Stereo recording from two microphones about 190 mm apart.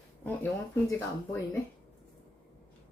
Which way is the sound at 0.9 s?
10° left (ahead or behind).